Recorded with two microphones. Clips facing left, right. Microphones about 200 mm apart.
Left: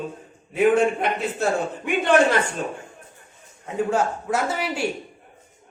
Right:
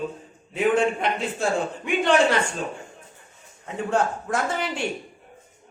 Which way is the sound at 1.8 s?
Centre (ahead or behind).